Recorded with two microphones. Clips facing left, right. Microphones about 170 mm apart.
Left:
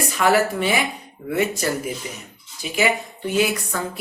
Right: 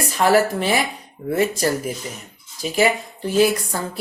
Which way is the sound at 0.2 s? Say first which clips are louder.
Right 2 dB; 40° right (ahead or behind).